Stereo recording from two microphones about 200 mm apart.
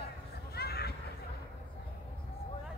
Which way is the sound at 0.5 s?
55° left (ahead or behind).